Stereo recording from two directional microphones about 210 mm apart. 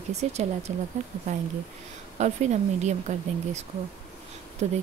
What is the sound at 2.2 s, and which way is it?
Speech, 35° right (ahead or behind).